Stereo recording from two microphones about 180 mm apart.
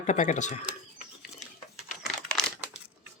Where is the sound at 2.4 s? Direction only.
5° left (ahead or behind).